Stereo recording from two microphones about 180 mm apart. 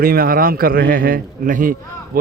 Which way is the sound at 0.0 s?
55° right (ahead or behind).